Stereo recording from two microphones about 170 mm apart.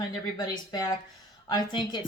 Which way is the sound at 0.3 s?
25° left (ahead or behind).